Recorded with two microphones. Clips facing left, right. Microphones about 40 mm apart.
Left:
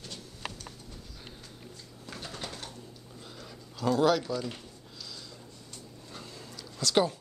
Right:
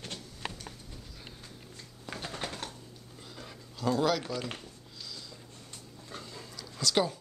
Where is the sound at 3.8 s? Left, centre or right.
Centre.